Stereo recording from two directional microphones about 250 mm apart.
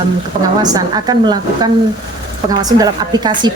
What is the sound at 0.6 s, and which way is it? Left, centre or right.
A woman's voice, centre.